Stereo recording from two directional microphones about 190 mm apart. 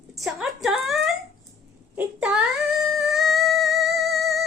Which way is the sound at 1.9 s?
5° right (ahead or behind).